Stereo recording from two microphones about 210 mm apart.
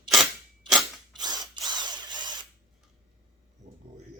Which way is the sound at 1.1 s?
20° right (ahead or behind).